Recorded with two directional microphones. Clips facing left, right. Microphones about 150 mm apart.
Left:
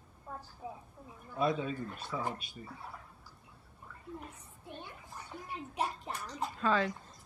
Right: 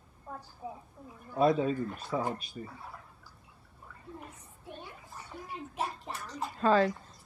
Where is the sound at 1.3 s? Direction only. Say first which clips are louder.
Right 6 dB; 35° right (ahead or behind).